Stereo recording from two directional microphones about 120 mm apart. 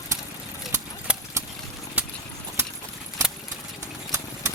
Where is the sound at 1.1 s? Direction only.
10° right (ahead or behind).